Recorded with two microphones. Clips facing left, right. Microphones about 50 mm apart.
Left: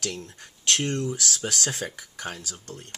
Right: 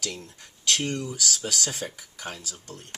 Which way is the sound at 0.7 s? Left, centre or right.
Left.